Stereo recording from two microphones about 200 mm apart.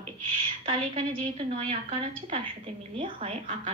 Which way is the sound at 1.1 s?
35° right (ahead or behind).